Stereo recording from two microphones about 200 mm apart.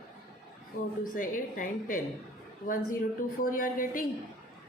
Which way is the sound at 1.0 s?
40° left (ahead or behind).